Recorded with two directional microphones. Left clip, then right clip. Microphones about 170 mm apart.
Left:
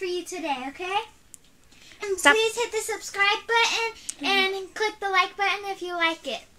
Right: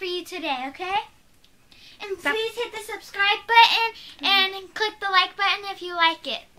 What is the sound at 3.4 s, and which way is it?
Child singing, 40° right (ahead or behind).